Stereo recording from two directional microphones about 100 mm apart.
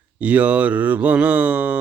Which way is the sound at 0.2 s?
10° right (ahead or behind).